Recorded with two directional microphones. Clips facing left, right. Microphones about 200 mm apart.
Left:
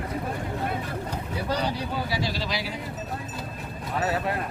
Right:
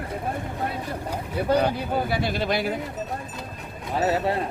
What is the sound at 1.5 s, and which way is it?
Speech, 55° right (ahead or behind).